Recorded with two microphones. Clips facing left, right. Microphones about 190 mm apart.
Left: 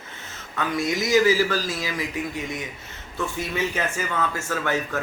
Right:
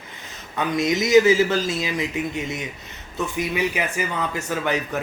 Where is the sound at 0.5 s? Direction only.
20° right (ahead or behind).